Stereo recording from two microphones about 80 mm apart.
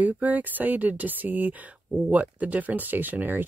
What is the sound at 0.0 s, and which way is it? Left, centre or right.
Speech, right.